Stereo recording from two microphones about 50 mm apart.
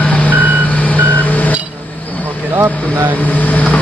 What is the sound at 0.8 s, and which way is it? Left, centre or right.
Reversing beeps, left.